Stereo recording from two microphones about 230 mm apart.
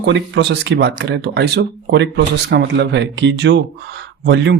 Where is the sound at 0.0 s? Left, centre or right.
Right.